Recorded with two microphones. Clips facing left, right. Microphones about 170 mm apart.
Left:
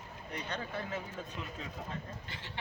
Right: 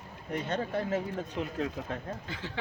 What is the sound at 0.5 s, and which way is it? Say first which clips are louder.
Speech: right 8 dB; 45° right (ahead or behind).